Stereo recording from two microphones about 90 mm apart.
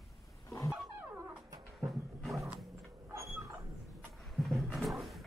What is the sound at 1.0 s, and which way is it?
Music, 25° right (ahead or behind).